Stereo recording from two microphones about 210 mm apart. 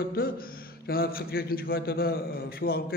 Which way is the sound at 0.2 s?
45° left (ahead or behind).